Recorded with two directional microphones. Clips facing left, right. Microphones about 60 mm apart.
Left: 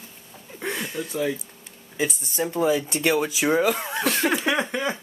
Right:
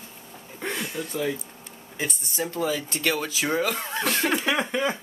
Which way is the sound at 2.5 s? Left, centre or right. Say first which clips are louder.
Left 6 dB; centre.